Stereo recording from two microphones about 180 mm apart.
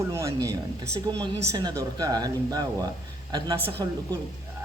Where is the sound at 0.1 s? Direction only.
15° right (ahead or behind).